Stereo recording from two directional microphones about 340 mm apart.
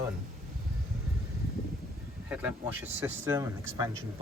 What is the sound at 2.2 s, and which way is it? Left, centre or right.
Speech, centre.